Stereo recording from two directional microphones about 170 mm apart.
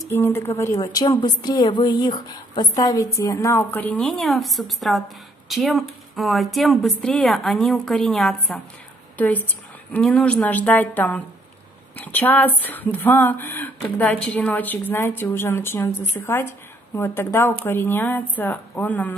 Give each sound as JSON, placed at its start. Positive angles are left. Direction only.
{"t": 0.1, "sound": "a woman's voice", "side_deg": 15}
{"t": 9.9, "sound": "speech", "side_deg": 5}